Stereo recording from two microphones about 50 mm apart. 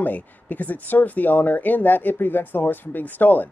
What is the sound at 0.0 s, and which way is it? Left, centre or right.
Speech, left.